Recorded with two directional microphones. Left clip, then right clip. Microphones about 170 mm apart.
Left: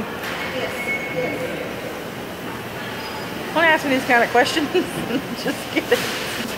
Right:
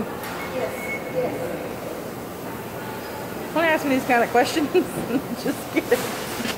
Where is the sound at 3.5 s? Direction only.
35° right (ahead or behind).